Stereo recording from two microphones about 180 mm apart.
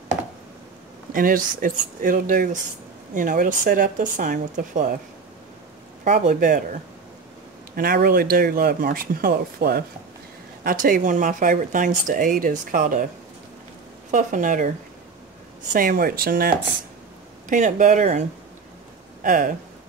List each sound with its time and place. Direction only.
1.1 s speech: 50° right (ahead or behind)
6.0 s speech: 45° right (ahead or behind)
7.7 s speech: 60° right (ahead or behind)
14.1 s speech: 45° right (ahead or behind)
15.7 s speech: 50° right (ahead or behind)
17.5 s speech: 45° right (ahead or behind)
19.2 s speech: 45° right (ahead or behind)